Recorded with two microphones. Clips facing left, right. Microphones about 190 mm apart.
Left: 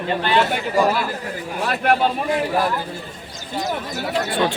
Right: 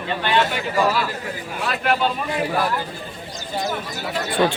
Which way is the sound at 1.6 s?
50° left (ahead or behind).